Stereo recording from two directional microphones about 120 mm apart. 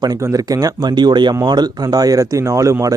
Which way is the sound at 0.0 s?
30° right (ahead or behind).